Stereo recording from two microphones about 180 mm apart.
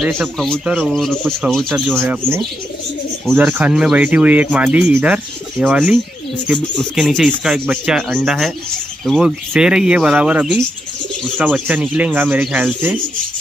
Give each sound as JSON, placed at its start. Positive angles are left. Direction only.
{"t": 0.0, "sound": "a man's voice", "side_deg": 0}
{"t": 2.0, "sound": "a man's voice", "side_deg": -15}